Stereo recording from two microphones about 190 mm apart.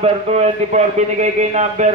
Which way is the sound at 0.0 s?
35° right (ahead or behind).